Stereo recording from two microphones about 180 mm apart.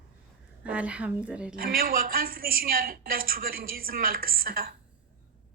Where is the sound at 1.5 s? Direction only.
55° right (ahead or behind).